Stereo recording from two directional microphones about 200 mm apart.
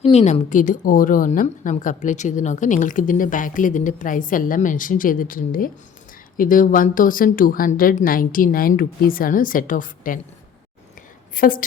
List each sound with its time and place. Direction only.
0.0 s a woman's voice: 30° left (ahead or behind)
11.3 s speech: 45° left (ahead or behind)